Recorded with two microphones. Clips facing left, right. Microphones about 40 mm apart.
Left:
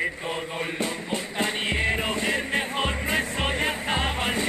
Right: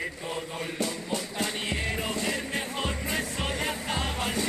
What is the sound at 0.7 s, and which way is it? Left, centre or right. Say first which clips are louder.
Music: left 2 dB; left.